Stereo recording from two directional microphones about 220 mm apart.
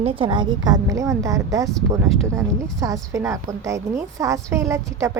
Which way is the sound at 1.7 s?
Centre (ahead or behind).